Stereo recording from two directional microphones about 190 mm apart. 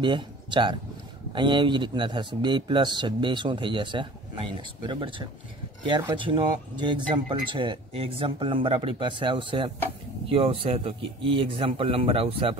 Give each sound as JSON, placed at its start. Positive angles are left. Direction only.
{"t": 0.0, "sound": "a man's voice", "side_deg": -25}